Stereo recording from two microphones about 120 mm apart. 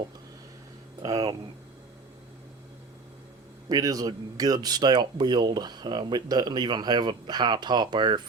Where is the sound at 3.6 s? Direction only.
30° right (ahead or behind).